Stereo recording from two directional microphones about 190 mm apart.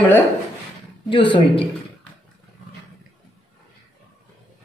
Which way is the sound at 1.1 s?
25° left (ahead or behind).